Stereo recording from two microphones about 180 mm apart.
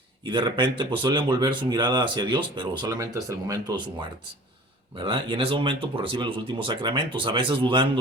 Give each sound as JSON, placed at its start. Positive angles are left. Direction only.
{"t": 0.3, "sound": "speech", "side_deg": -25}
{"t": 4.9, "sound": "speech", "side_deg": -30}